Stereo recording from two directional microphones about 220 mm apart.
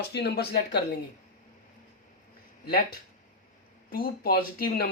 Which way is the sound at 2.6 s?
45° left (ahead or behind).